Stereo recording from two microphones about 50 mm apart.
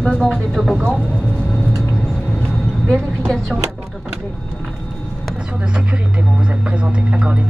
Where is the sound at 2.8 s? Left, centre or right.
Centre.